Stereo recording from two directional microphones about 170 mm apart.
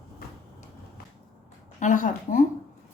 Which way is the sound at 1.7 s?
50° left (ahead or behind).